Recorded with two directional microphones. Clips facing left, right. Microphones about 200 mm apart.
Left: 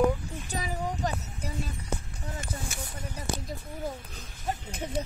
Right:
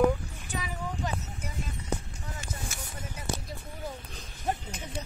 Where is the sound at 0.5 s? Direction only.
40° left (ahead or behind).